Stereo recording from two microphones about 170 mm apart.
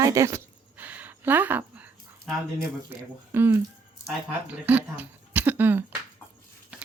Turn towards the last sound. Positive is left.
turn(degrees=-10)  # may be behind; listen again after turning